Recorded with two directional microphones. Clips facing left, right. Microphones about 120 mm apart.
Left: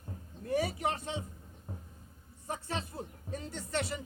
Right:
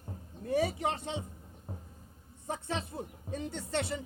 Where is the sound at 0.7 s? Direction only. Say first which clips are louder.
Right 1 dB; 25° right (ahead or behind).